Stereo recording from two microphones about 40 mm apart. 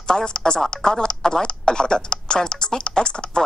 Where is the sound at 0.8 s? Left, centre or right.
Centre.